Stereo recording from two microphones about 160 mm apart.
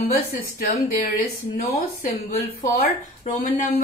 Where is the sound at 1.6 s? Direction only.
65° left (ahead or behind).